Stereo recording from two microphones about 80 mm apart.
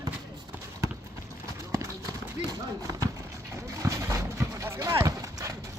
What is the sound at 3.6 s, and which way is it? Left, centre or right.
Clip-clop, right.